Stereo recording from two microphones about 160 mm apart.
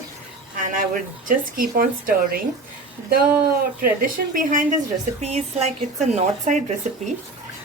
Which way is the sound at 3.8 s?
60° right (ahead or behind).